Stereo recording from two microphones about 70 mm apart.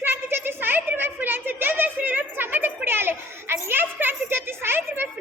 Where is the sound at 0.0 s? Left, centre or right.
Right.